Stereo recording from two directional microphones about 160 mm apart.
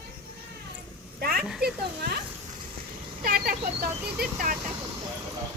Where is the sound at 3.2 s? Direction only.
65° right (ahead or behind).